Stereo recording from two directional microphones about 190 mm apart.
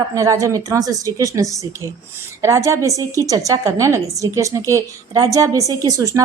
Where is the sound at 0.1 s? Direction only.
15° right (ahead or behind).